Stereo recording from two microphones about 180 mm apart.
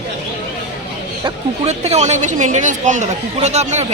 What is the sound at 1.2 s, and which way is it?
Speech, 35° right (ahead or behind).